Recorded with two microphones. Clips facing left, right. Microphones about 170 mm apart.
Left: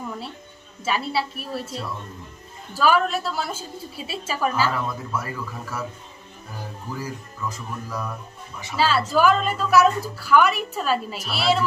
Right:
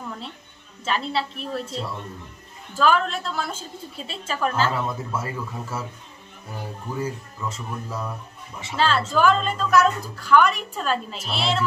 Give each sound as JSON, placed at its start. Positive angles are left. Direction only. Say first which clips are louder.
{"t": 0.8, "sound": "a woman's voice", "louder": "left 1 dB", "side_deg": 10}
{"t": 2.7, "sound": "a woman's voice", "louder": "left 1 dB", "side_deg": 10}
{"t": 4.7, "sound": "speech", "louder": "even", "side_deg": -25}
{"t": 7.0, "sound": "speech", "louder": "right 4 dB", "side_deg": -25}
{"t": 8.7, "sound": "a woman's voice", "louder": "left 1 dB", "side_deg": 5}